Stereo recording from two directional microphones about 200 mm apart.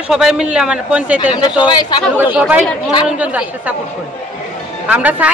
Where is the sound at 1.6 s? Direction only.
20° left (ahead or behind).